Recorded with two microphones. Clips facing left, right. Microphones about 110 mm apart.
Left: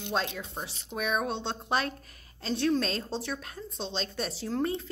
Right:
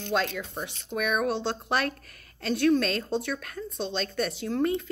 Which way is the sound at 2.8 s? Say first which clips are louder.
Right 4 dB; 30° left (ahead or behind).